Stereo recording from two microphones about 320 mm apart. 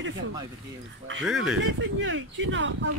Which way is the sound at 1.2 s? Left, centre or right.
Centre.